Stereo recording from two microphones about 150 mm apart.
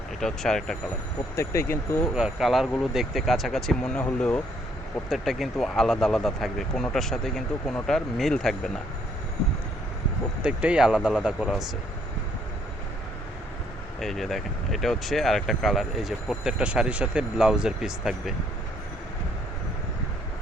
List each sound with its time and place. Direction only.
0.2 s speech: 5° left (ahead or behind)
1.4 s speech: 20° left (ahead or behind)
2.1 s speech: 5° right (ahead or behind)
10.4 s speech: 5° right (ahead or behind)
14.0 s speech: centre (ahead or behind)